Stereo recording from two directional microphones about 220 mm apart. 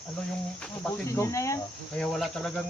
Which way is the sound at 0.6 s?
5° left (ahead or behind).